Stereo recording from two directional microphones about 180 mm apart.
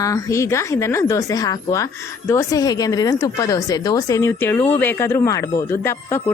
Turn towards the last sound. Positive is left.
turn(degrees=15)  # may be behind; listen again after turning